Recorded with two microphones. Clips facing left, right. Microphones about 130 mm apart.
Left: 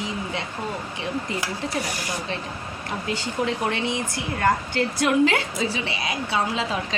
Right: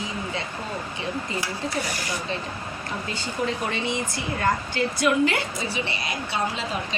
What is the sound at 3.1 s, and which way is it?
Speech, 70° left (ahead or behind).